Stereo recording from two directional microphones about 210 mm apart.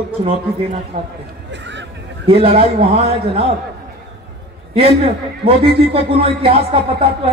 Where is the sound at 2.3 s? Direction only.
25° right (ahead or behind).